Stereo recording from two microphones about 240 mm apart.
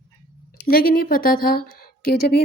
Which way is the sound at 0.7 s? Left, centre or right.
Left.